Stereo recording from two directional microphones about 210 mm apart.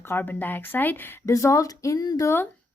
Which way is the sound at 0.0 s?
10° left (ahead or behind).